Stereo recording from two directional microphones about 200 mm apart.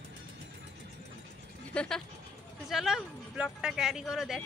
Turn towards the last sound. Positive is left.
turn(degrees=-5)  # may be behind; listen again after turning